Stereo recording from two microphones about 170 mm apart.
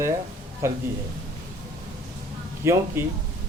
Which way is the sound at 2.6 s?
15° right (ahead or behind).